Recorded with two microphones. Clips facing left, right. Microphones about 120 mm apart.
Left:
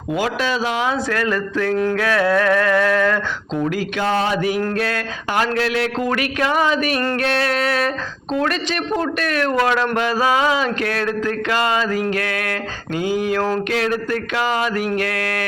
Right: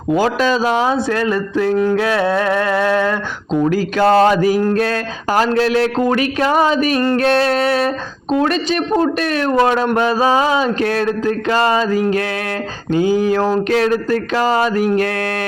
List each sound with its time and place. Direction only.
0.1 s speech: 35° right (ahead or behind)
1.1 s speech: 25° right (ahead or behind)
3.7 s speech: 35° right (ahead or behind)